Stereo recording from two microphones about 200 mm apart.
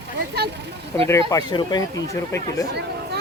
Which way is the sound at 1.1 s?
15° left (ahead or behind).